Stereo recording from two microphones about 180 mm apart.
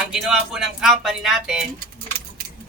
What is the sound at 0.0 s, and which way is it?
Speech, 5° right (ahead or behind).